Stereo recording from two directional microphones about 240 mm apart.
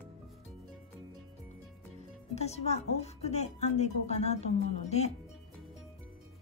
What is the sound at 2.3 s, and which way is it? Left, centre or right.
Speech, left.